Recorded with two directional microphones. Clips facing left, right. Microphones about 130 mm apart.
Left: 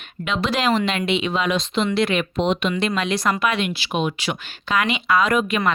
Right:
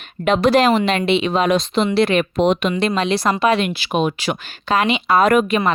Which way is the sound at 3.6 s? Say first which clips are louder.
Right 4 dB; 45° right (ahead or behind).